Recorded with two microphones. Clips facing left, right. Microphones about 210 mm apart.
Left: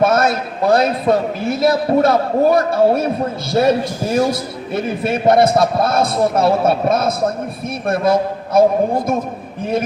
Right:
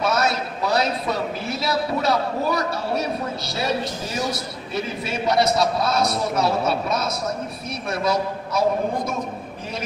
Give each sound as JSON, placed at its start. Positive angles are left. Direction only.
{"t": 0.0, "sound": "a man's voice", "side_deg": 55}